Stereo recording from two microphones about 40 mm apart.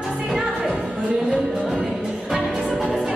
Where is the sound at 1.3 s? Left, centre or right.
Right.